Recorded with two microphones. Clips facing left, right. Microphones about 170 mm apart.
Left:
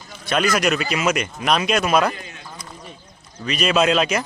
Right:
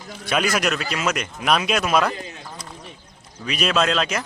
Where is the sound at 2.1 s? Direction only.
30° right (ahead or behind).